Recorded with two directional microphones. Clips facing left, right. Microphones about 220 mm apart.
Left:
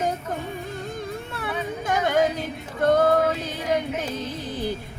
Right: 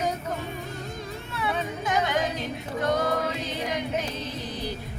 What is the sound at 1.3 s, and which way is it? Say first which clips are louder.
Music: right 3 dB; 50° left (ahead or behind).